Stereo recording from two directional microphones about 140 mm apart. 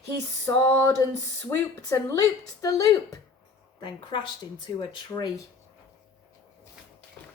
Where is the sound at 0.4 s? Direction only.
20° left (ahead or behind).